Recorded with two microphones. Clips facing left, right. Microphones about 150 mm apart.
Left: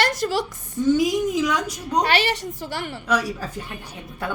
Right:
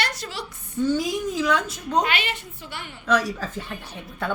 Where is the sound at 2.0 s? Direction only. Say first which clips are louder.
Left 5 dB; 35° left (ahead or behind).